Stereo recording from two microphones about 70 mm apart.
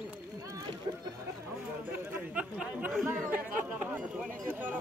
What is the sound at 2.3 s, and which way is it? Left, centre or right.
Speech, centre.